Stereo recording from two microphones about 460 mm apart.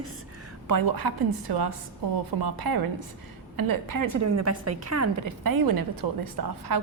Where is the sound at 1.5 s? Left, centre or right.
Right.